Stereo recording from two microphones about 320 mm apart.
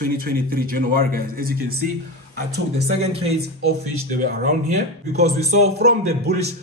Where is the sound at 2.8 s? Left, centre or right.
Centre.